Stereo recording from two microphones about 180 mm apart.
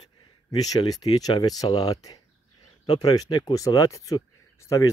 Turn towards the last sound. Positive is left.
turn(degrees=15)  # may be behind; listen again after turning